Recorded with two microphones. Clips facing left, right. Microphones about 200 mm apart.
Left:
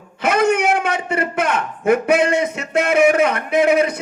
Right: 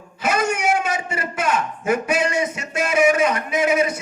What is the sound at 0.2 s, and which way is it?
A man's voice, 60° left (ahead or behind).